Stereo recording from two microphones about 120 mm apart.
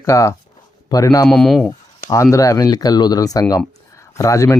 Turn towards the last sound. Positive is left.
turn(degrees=25)  # may be behind; listen again after turning